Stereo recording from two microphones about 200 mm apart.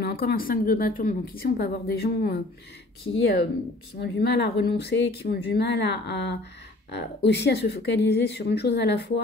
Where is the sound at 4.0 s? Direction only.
60° left (ahead or behind).